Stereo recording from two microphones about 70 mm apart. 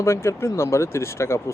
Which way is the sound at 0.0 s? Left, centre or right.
Left.